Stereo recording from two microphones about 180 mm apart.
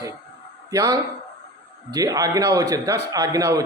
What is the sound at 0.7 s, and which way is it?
A man's voice, 20° right (ahead or behind).